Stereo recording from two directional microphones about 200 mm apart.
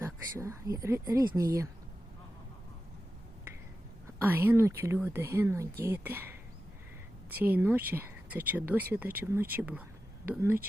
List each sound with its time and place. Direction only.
0.0 s speech: 15° right (ahead or behind)
4.2 s speech: 10° right (ahead or behind)